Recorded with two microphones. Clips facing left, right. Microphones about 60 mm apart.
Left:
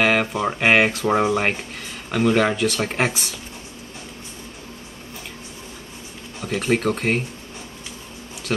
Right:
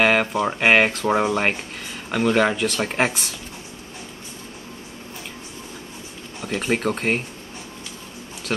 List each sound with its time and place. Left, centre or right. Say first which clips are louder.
0.0 s speech: right 1 dB; centre
6.4 s speech: left 2 dB; centre
8.5 s speech: left 1 dB; centre